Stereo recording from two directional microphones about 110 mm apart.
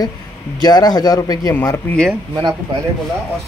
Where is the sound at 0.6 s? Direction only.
40° left (ahead or behind).